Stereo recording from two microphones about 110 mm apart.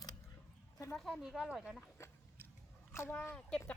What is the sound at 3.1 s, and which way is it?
Speech, 20° left (ahead or behind).